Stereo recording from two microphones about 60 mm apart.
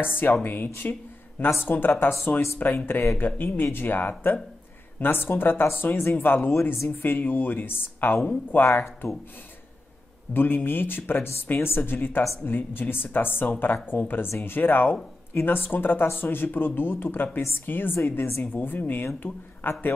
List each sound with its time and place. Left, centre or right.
0.2 s speech: left
7.0 s speech: left
10.3 s speech: left